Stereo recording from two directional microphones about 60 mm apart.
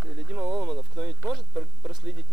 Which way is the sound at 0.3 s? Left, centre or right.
Centre.